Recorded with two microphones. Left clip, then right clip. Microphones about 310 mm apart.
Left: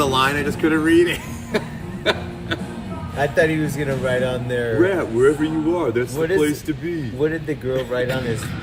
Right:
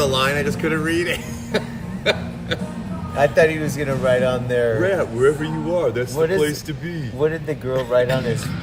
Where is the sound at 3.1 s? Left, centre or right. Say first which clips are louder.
Right 3 dB; centre.